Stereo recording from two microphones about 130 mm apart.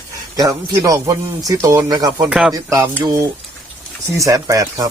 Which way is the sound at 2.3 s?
5° right (ahead or behind).